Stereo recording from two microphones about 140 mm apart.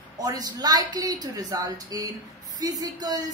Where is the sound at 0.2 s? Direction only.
25° right (ahead or behind).